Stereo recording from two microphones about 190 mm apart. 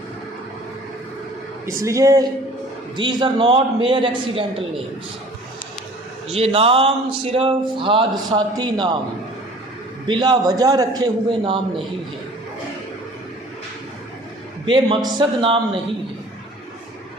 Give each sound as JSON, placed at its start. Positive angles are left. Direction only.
{"t": 1.6, "sound": "a man's voice", "side_deg": -15}
{"t": 6.3, "sound": "a man's voice", "side_deg": -30}
{"t": 10.1, "sound": "a man's voice", "side_deg": -25}
{"t": 14.7, "sound": "a man's voice", "side_deg": -25}